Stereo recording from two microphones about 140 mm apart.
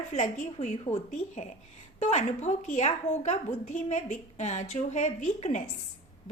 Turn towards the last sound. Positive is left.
turn(degrees=60)  # may be behind; listen again after turning